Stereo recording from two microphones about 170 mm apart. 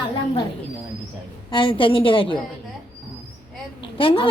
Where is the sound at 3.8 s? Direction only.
30° left (ahead or behind).